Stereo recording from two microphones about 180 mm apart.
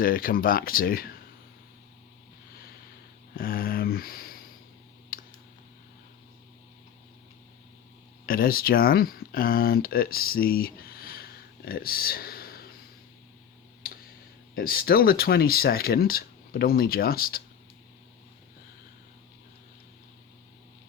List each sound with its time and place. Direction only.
0.0 s speech: 55° left (ahead or behind)
3.3 s a sound: 55° left (ahead or behind)
5.1 s clicking: 50° left (ahead or behind)
8.3 s speech: 55° left (ahead or behind)
14.5 s speech: 55° left (ahead or behind)